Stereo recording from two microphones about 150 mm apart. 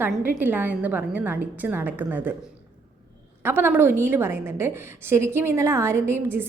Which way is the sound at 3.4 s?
15° right (ahead or behind).